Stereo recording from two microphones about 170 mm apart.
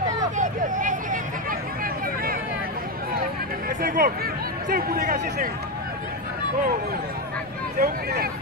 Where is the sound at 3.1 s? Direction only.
60° right (ahead or behind).